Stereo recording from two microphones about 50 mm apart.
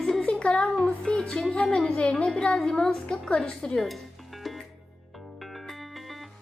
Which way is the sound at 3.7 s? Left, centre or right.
Centre.